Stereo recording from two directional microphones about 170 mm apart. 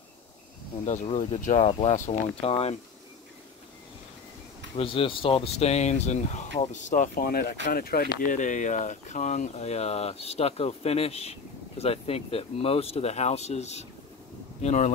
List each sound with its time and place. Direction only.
0.8 s speech: 45° left (ahead or behind)
1.6 s speech: 35° left (ahead or behind)
4.7 s speech: 30° left (ahead or behind); by 8.1 s 60° left (ahead or behind)
8.2 s speech: 50° left (ahead or behind)